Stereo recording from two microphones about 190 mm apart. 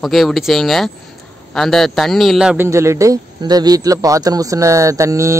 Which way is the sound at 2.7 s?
15° right (ahead or behind).